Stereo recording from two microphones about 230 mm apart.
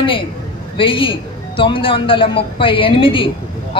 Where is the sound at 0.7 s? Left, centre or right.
Left.